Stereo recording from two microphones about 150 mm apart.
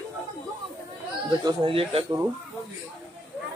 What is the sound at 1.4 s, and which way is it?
Speech, 35° right (ahead or behind).